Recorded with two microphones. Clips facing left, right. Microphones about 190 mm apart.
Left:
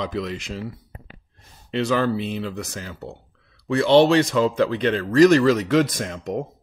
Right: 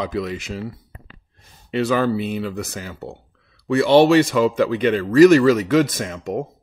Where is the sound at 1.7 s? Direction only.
5° right (ahead or behind).